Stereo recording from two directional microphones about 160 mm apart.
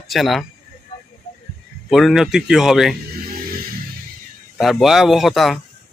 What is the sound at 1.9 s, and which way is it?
Speech, centre (ahead or behind).